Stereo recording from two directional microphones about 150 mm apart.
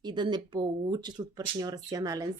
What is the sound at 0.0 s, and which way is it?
A woman's voice, 30° right (ahead or behind).